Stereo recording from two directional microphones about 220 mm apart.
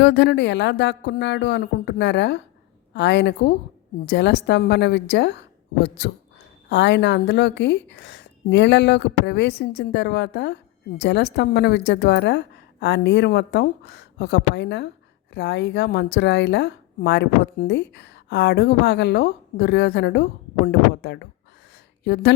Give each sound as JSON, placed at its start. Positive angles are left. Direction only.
{"t": 0.0, "sound": "a woman's voice", "side_deg": 50}